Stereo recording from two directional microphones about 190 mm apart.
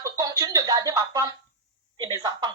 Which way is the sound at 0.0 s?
20° right (ahead or behind).